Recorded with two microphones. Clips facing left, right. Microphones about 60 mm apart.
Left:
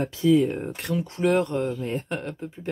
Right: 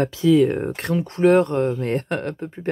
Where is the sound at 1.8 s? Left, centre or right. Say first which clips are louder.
Right 6 dB; right.